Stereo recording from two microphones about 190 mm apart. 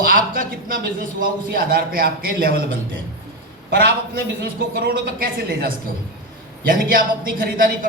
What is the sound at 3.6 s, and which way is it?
A man's voice, 55° right (ahead or behind).